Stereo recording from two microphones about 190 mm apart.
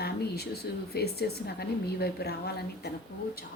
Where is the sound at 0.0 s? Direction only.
55° left (ahead or behind).